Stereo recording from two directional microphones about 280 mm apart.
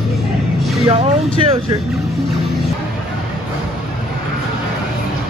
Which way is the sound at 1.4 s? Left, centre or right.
Centre.